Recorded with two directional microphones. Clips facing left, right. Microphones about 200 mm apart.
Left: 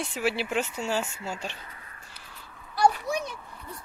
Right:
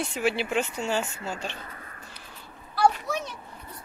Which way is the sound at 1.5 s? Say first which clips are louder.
Right 5 dB; 45° right (ahead or behind).